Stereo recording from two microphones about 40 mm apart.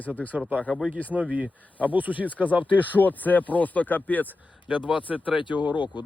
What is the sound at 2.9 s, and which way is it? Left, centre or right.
Speech, left.